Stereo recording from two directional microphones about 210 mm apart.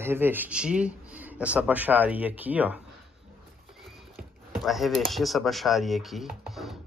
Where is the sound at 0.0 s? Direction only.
10° right (ahead or behind).